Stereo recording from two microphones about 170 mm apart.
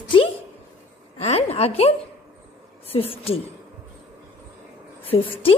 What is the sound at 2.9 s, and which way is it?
Speech, 35° left (ahead or behind).